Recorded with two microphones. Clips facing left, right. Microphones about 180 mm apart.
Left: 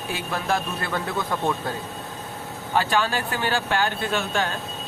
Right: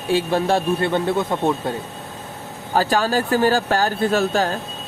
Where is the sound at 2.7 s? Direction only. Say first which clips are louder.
Right 4 dB; 40° right (ahead or behind).